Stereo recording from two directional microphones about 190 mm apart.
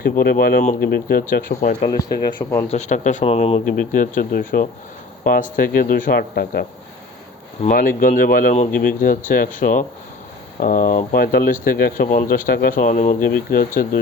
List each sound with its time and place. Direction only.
0.0 s speech: 55° left (ahead or behind)
1.8 s speech: 20° left (ahead or behind)
2.6 s speech: 35° left (ahead or behind)
3.7 s speech: 45° left (ahead or behind)
7.7 s speech: 50° left (ahead or behind)